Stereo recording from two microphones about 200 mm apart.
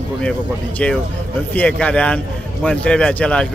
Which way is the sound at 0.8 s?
5° left (ahead or behind).